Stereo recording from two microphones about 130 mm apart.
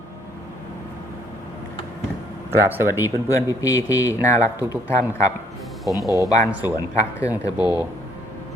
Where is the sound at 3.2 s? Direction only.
25° left (ahead or behind).